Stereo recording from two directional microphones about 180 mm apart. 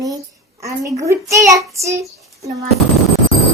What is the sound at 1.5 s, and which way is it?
Child singing, 15° right (ahead or behind).